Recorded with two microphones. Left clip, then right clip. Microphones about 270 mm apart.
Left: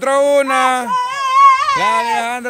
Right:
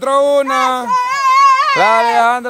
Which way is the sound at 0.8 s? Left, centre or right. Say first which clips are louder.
Right 4 dB; right.